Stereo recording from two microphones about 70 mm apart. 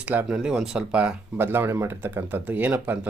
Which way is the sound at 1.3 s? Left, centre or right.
Right.